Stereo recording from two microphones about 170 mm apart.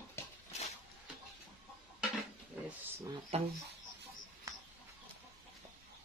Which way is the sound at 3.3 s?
35° right (ahead or behind).